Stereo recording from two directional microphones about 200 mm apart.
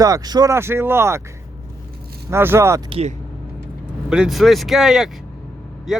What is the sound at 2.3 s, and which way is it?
Speech, 10° right (ahead or behind).